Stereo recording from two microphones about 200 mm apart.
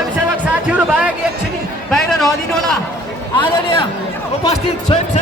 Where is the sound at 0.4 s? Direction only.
5° right (ahead or behind).